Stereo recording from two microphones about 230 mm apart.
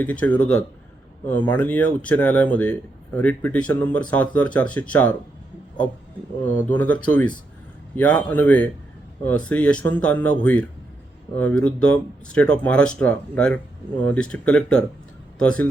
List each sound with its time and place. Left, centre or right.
0.0 s speech: centre
6.4 s speech: centre